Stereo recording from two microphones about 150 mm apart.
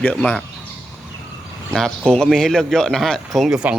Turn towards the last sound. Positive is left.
turn(degrees=-5)  # may be behind; listen again after turning